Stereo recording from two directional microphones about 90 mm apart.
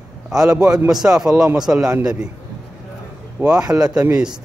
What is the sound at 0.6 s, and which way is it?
A man's voice, 10° right (ahead or behind).